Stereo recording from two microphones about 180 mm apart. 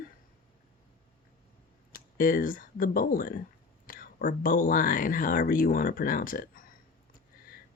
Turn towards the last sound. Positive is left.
turn(degrees=50)  # may be behind; listen again after turning